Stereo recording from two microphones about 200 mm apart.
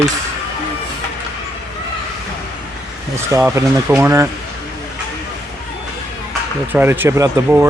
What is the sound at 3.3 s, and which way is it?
Speech, 15° right (ahead or behind).